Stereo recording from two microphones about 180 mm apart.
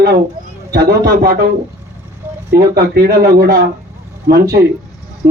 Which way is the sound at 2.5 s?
60° right (ahead or behind).